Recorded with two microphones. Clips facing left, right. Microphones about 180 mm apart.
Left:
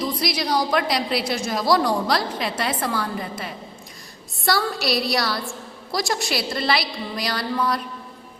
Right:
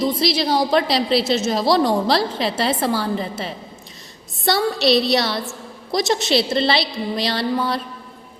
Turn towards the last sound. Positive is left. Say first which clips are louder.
# right 3 dB
turn(degrees=-25)  # may be behind; listen again after turning